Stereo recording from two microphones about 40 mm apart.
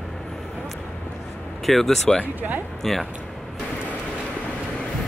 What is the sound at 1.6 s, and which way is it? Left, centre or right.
Speech, centre.